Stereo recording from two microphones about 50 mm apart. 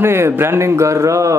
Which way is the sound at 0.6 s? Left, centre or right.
Right.